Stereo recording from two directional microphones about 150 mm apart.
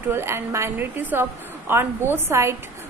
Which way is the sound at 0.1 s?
20° right (ahead or behind).